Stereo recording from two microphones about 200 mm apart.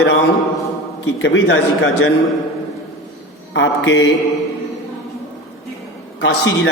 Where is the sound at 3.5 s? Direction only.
65° left (ahead or behind).